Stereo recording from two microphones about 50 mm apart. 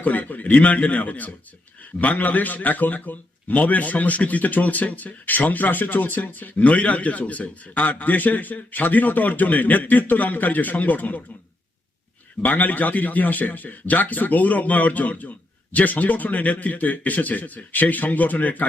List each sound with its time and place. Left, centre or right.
0.0 s a man's voice: left
12.4 s a man's voice: left